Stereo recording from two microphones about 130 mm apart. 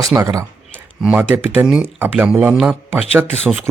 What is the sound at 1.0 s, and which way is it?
Speech, 10° right (ahead or behind).